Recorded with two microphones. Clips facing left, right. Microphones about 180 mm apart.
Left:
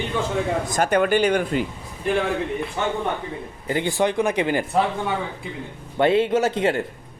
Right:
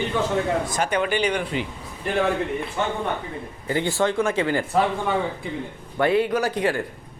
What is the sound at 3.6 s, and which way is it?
Speech, 20° left (ahead or behind).